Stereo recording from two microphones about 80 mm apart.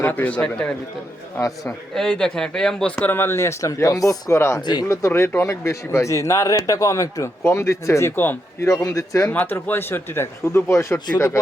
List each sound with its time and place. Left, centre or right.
0.0 s speech: left
1.4 s a man's voice: left
2.0 s speech: centre
3.0 s speech: left
4.4 s speech: left
4.6 s speech: left
4.9 s speech: left
8.1 s speech: left
8.7 s speech: left
9.3 s speech: left